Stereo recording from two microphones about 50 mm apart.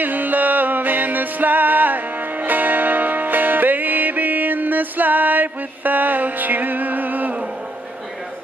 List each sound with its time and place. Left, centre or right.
0.0 s music: right